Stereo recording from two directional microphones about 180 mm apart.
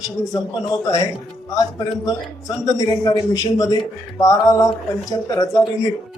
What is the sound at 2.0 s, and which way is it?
A man's voice, 20° left (ahead or behind).